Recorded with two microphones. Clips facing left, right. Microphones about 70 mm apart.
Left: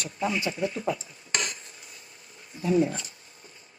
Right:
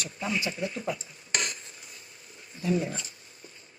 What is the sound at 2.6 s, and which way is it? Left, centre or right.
Speech, left.